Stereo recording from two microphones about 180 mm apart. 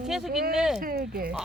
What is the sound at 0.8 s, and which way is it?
Speech, 55° right (ahead or behind).